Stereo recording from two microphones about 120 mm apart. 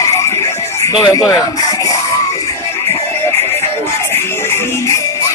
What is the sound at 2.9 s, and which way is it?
Music, 20° left (ahead or behind).